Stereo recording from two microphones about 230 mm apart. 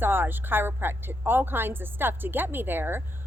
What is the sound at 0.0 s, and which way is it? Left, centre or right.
A woman's voice, centre.